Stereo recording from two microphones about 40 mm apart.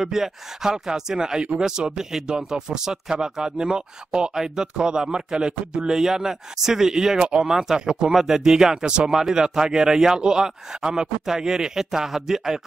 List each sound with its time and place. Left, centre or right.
0.0 s speech: centre